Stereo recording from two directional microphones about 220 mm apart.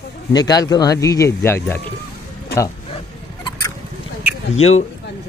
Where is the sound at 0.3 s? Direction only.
20° left (ahead or behind).